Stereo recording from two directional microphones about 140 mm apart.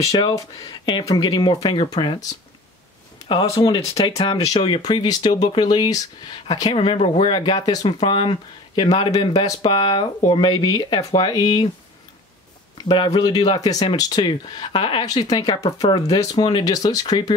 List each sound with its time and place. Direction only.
0.0 s speech: 25° left (ahead or behind)
12.7 s speech: 35° left (ahead or behind)